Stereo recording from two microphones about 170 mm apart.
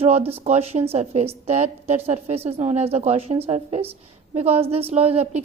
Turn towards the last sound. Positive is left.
turn(degrees=-35)  # may be behind; listen again after turning